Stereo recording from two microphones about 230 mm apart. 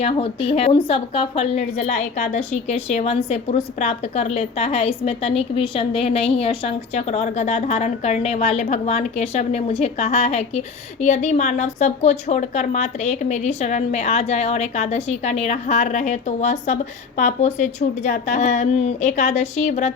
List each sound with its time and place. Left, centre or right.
0.0 s a woman's voice: left